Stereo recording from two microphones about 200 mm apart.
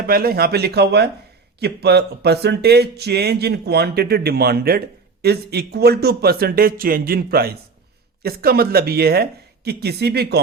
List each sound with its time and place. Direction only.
0.0 s speech: 50° right (ahead or behind)